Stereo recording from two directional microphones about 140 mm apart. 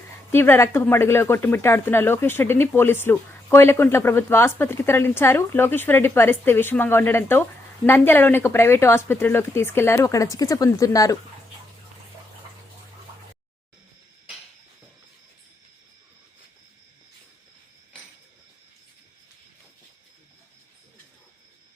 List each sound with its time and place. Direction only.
0.3 s speech: 15° left (ahead or behind)